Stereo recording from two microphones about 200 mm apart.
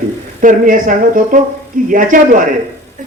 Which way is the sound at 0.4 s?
40° right (ahead or behind).